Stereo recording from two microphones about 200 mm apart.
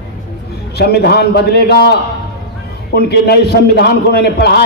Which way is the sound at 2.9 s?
55° left (ahead or behind).